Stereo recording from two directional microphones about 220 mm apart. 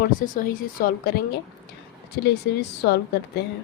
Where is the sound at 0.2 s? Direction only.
40° left (ahead or behind).